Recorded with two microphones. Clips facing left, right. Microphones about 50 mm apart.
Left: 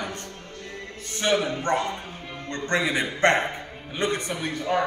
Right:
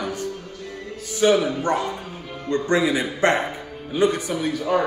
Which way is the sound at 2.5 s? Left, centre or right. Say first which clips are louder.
Right 8 dB; centre.